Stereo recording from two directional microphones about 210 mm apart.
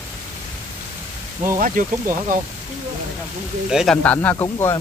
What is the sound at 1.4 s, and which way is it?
Speech, 40° right (ahead or behind).